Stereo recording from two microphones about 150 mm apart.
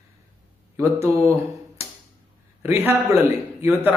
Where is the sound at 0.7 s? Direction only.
20° right (ahead or behind).